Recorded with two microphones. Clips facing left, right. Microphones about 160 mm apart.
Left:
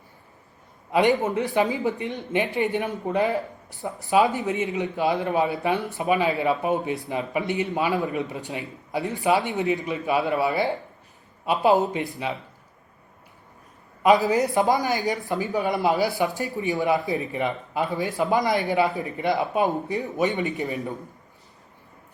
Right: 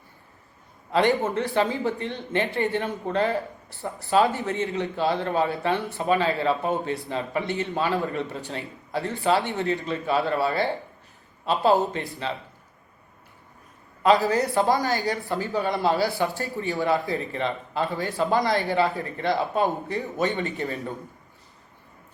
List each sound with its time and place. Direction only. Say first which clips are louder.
0.9 s speech: left 1 dB; 15° left (ahead or behind)
14.0 s speech: left 1 dB; 15° left (ahead or behind)